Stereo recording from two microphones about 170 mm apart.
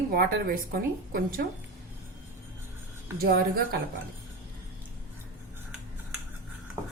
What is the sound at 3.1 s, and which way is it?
Speech, 65° right (ahead or behind).